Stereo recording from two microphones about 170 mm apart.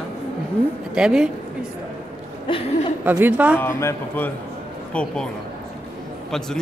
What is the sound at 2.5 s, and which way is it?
Speech, 30° left (ahead or behind).